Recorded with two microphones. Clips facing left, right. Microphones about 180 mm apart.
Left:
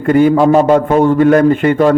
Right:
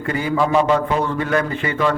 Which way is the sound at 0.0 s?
55° left (ahead or behind).